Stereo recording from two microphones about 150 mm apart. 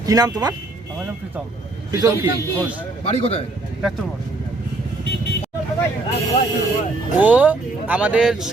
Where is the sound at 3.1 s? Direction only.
45° left (ahead or behind).